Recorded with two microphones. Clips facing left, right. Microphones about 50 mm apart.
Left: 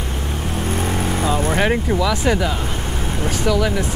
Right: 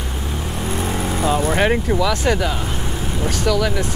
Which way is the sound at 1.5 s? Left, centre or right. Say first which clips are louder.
Right 1 dB; centre.